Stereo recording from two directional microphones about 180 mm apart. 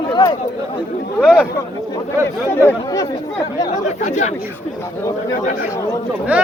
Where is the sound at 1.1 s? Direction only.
5° right (ahead or behind).